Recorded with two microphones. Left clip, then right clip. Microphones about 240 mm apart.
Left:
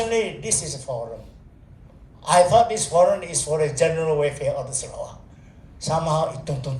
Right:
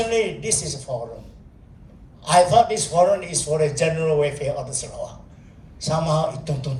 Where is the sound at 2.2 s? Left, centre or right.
Centre.